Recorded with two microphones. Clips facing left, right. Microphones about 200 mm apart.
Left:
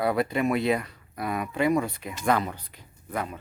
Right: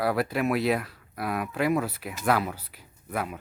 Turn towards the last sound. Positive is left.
turn(degrees=-5)  # may be behind; listen again after turning